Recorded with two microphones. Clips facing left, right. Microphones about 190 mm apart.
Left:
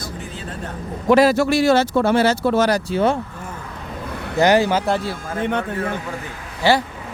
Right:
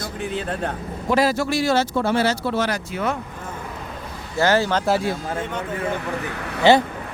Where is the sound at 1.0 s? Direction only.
65° left (ahead or behind); by 2.8 s 45° left (ahead or behind).